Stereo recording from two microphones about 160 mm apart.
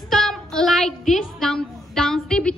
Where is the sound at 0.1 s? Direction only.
Centre (ahead or behind).